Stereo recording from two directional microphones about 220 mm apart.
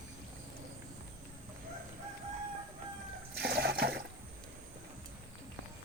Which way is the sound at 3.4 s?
45° right (ahead or behind).